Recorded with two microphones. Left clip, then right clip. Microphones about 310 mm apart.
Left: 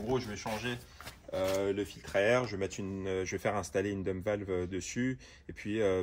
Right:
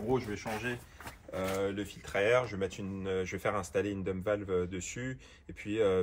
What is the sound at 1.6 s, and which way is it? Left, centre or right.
Speech, left.